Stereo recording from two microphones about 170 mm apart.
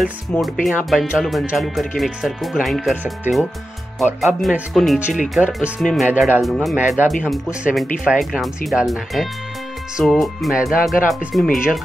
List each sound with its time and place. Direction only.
0.3 s speech: 10° left (ahead or behind)
6.0 s speech: 10° right (ahead or behind)
6.4 s speech: centre (ahead or behind)